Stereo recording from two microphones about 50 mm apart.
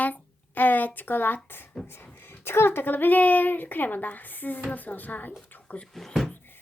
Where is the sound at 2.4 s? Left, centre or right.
Left.